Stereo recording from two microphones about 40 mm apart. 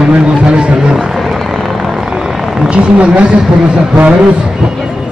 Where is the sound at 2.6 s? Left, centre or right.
Right.